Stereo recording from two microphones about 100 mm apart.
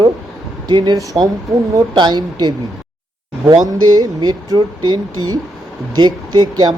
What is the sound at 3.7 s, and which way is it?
Speech, 40° right (ahead or behind).